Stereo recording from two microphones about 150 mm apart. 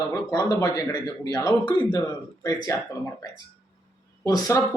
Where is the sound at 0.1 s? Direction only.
25° left (ahead or behind).